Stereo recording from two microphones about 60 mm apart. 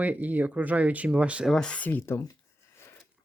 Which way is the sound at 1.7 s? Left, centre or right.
Left.